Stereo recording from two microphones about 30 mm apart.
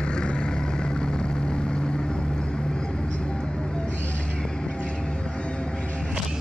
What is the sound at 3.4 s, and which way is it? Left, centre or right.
Music, centre.